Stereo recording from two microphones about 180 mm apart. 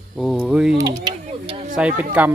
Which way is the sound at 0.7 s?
20° right (ahead or behind).